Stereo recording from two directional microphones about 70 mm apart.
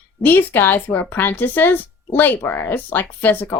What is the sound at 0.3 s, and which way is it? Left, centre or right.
Speech, left.